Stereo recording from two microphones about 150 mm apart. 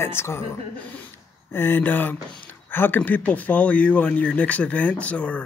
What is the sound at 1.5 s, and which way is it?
Speech, 15° left (ahead or behind).